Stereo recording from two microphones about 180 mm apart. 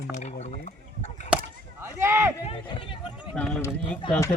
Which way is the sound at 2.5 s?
30° left (ahead or behind).